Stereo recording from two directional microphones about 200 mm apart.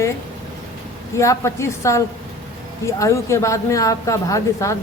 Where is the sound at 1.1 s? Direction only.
15° left (ahead or behind).